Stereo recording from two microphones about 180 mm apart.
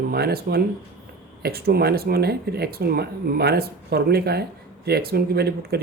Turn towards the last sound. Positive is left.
turn(degrees=-65)  # may be behind; listen again after turning